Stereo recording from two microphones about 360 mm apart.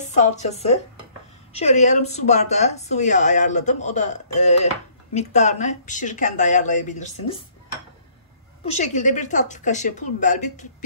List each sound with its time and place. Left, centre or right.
0.0 s speech: centre
8.6 s speech: centre